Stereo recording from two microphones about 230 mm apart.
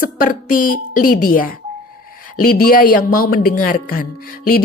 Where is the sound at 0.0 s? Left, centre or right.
Left.